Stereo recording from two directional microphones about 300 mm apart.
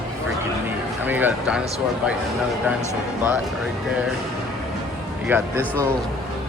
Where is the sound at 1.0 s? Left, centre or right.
Centre.